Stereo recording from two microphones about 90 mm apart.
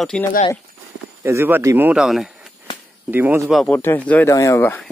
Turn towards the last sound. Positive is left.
turn(degrees=35)  # may be behind; listen again after turning